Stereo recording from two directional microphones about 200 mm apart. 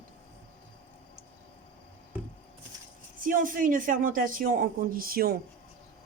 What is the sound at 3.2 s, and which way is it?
Speech, 45° right (ahead or behind).